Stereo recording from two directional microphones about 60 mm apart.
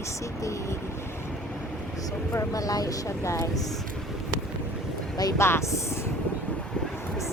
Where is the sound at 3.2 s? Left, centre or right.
Left.